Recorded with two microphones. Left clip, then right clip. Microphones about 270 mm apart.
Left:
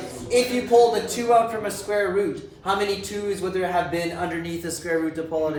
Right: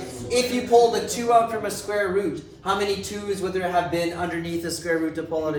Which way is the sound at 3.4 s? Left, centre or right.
Centre.